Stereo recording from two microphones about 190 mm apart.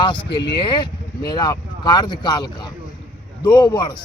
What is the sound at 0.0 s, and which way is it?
A man's voice, 25° left (ahead or behind).